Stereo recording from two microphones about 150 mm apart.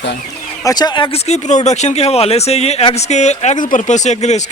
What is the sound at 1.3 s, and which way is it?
Speech, 50° left (ahead or behind).